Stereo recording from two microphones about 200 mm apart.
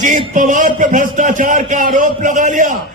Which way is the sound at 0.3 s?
40° right (ahead or behind).